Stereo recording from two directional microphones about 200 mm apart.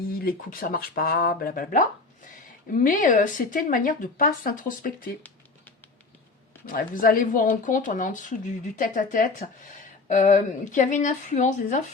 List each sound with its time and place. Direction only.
0.2 s speech: 45° left (ahead or behind)
6.7 s speech: 45° left (ahead or behind)